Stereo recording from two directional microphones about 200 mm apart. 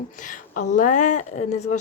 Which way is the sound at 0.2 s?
40° left (ahead or behind).